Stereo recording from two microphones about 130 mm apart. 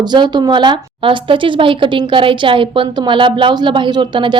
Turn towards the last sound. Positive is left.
turn(degrees=-35)  # may be behind; listen again after turning